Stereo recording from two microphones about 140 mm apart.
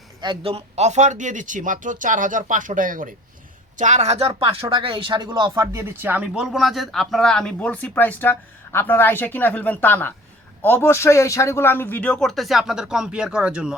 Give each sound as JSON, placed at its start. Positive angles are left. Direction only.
{"t": 0.2, "sound": "speech", "side_deg": -35}
{"t": 0.5, "sound": "speech", "side_deg": -55}
{"t": 3.8, "sound": "speech", "side_deg": -60}
{"t": 5.7, "sound": "speech", "side_deg": -15}